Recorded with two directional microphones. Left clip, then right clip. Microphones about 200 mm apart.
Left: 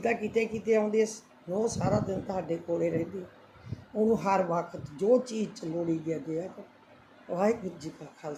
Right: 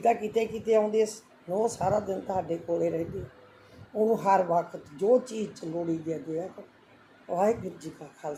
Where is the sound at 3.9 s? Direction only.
20° left (ahead or behind).